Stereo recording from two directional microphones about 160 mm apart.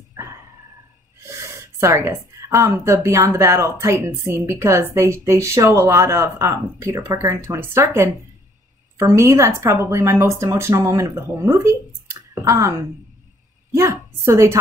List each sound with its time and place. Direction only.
1.2 s a woman's voice: 15° right (ahead or behind)